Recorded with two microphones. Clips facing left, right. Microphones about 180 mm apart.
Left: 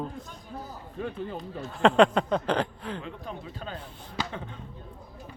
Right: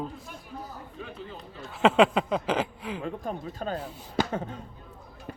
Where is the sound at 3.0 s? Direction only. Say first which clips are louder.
Right 5 dB; 45° right (ahead or behind).